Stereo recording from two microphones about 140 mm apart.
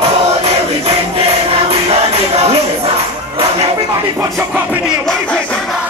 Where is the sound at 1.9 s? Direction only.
45° right (ahead or behind).